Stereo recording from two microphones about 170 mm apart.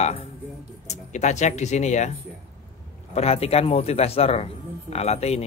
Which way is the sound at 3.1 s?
40° left (ahead or behind).